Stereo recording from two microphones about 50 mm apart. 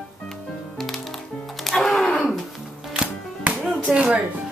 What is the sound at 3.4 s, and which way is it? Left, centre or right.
Music, right.